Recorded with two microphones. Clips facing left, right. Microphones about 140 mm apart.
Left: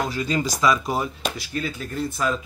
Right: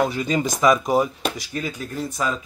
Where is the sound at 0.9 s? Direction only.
15° right (ahead or behind).